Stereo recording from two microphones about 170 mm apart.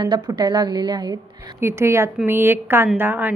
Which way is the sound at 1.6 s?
15° right (ahead or behind).